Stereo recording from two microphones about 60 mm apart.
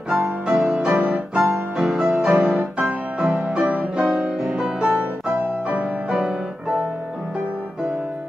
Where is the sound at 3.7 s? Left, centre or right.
Centre.